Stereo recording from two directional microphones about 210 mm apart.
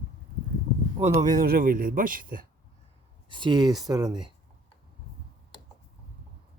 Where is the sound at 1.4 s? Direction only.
45° right (ahead or behind).